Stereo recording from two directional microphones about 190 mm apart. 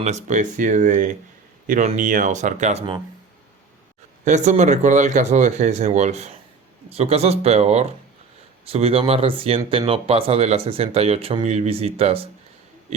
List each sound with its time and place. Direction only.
0.0 s speech: 35° right (ahead or behind)
4.3 s speech: 40° right (ahead or behind)